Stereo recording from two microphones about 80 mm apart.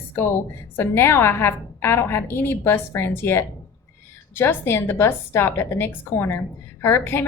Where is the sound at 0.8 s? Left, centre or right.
Left.